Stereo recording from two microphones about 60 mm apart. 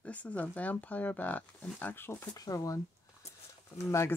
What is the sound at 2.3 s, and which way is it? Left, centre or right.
Speech, left.